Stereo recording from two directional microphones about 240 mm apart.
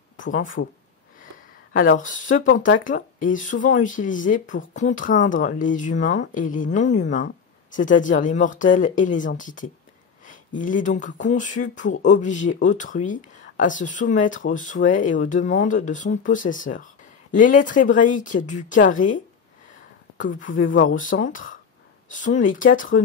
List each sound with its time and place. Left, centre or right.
0.6 s speech: left
1.7 s speech: left
20.5 s speech: left
20.8 s speech: left